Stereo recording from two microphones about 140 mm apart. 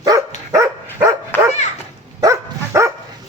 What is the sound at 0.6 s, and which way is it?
Dog, 20° right (ahead or behind).